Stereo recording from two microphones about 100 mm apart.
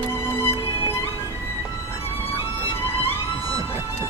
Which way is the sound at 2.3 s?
65° left (ahead or behind).